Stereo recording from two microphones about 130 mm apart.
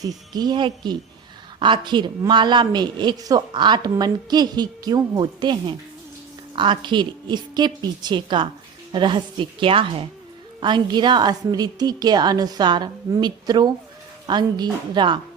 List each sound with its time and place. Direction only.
0.0 s a woman's voice: 30° right (ahead or behind)